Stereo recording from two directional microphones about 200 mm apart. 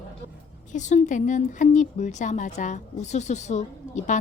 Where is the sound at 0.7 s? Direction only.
35° left (ahead or behind).